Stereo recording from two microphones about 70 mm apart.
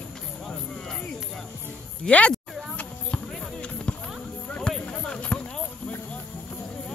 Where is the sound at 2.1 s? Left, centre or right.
Centre.